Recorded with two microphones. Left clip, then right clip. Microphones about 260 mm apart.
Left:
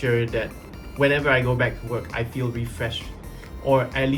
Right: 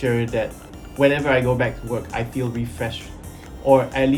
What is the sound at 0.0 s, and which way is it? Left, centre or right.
Speech, centre.